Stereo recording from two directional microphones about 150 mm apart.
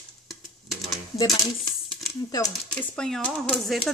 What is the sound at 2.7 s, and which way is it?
Speech, 5° left (ahead or behind).